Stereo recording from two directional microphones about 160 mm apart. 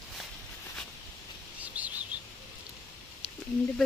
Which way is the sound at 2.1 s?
10° right (ahead or behind).